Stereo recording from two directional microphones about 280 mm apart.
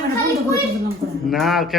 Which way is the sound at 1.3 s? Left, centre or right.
Centre.